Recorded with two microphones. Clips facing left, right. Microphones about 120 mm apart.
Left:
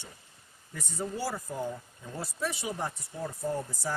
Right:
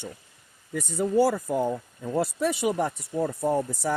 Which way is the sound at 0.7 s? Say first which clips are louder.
Right 13 dB; 80° right.